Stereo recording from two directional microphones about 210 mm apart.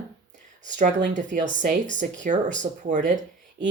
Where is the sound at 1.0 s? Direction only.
35° right (ahead or behind).